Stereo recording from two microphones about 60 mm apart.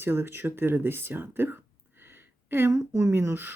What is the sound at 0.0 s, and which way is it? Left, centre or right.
Speech, right.